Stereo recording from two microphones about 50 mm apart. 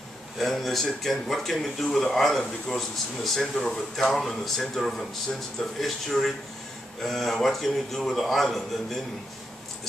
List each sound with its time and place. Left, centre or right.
0.4 s speech: centre